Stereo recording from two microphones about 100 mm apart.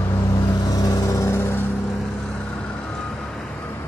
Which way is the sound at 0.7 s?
40° left (ahead or behind).